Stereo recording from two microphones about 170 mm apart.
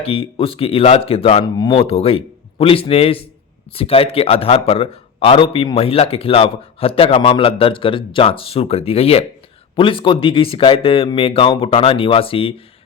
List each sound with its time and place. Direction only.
0.0 s a man's voice: 35° left (ahead or behind)
1.5 s a man's voice: 25° left (ahead or behind)